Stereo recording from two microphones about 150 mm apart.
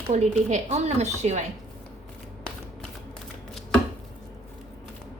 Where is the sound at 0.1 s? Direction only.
50° right (ahead or behind).